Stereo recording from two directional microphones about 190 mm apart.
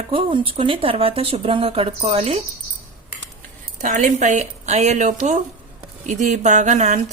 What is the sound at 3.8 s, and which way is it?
Speech, 40° right (ahead or behind).